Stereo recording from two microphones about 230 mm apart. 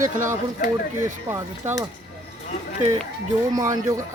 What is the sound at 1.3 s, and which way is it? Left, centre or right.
Speech, centre.